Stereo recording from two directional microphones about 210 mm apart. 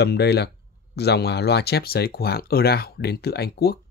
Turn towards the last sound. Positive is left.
turn(degrees=50)  # may be behind; listen again after turning